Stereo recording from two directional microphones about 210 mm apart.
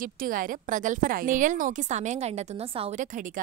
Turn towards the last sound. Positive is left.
turn(degrees=-40)  # may be behind; listen again after turning